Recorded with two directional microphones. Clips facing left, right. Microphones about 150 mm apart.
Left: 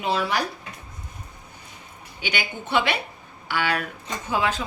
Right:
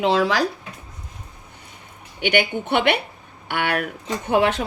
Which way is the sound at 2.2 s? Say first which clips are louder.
Right 10 dB; 60° right (ahead or behind).